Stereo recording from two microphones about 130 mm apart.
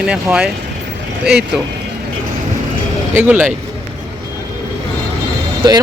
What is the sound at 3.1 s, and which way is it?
Speech, 10° right (ahead or behind).